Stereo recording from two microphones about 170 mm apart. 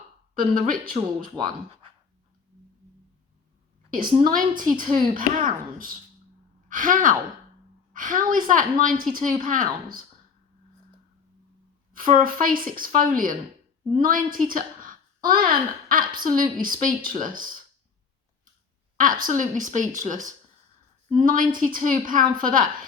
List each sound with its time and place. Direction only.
0.3 s a woman's voice: 55° right (ahead or behind)
4.2 s a woman's voice: 55° right (ahead or behind)
11.9 s a woman's voice: 55° right (ahead or behind)
18.9 s a woman's voice: 50° right (ahead or behind)